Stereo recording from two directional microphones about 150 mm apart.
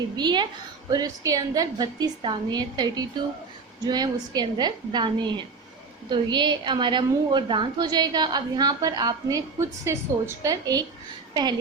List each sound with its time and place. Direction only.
0.2 s a woman's voice: 30° right (ahead or behind)